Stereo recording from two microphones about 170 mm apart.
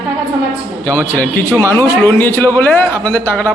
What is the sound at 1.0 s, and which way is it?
A man's voice, 5° left (ahead or behind).